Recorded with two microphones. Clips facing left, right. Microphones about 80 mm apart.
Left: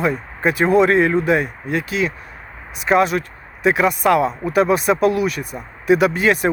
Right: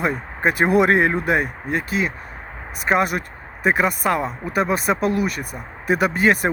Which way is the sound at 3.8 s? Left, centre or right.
Centre.